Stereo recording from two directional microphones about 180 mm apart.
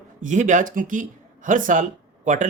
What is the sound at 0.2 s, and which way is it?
Speech, 45° right (ahead or behind).